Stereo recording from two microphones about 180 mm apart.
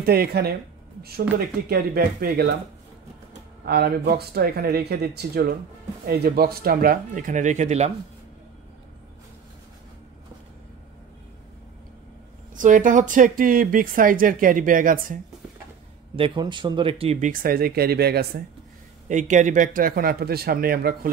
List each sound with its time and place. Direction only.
0.0 s speech: 60° right (ahead or behind)
1.7 s speech: 60° right (ahead or behind)
3.6 s speech: 60° right (ahead or behind); by 7.9 s 40° right (ahead or behind)
12.5 s speech: 45° right (ahead or behind)
16.2 s speech: 25° right (ahead or behind)
17.3 s speech: 50° right (ahead or behind)
19.0 s speech: 45° right (ahead or behind)